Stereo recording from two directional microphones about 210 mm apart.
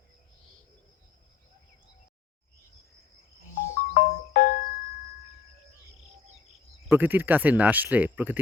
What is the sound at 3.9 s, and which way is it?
Music, 40° left (ahead or behind).